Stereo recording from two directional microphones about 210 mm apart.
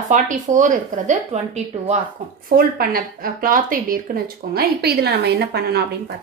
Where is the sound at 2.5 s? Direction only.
45° right (ahead or behind).